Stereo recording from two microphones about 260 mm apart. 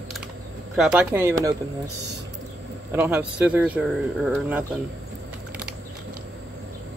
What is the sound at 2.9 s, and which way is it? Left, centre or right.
Speech, centre.